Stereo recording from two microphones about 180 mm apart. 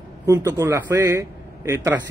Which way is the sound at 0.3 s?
15° right (ahead or behind).